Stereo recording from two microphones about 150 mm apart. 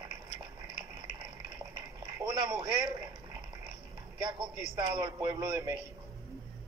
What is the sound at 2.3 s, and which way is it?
Radio, 30° right (ahead or behind).